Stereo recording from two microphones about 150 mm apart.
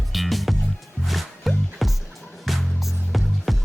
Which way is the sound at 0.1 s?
Centre (ahead or behind).